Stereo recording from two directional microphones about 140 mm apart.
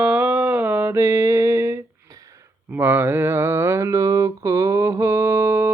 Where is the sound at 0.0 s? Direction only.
10° right (ahead or behind).